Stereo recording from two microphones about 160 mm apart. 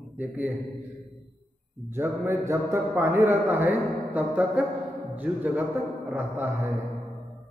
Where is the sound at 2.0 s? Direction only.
15° right (ahead or behind).